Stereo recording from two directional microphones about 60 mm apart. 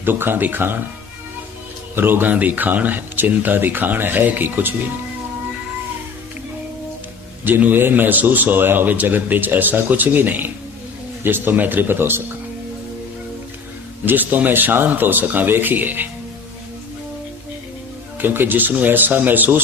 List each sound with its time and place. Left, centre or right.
0.0 s speech: right
2.0 s speech: right
7.4 s speech: right
14.0 s speech: right
18.2 s speech: right